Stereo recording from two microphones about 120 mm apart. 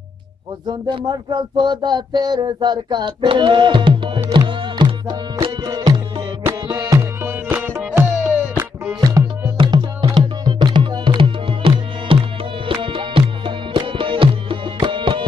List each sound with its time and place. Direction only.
0.7 s a sound: 35° right (ahead or behind)
4.3 s music: 40° right (ahead or behind)
7.2 s music: 20° right (ahead or behind)
9.0 s music: 30° right (ahead or behind)